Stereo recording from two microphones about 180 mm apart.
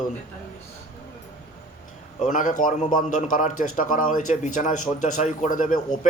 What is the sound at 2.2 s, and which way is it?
Speech, 45° left (ahead or behind).